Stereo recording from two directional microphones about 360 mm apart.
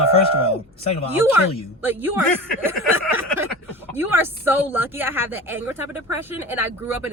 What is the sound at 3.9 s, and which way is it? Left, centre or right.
A woman's voice, centre.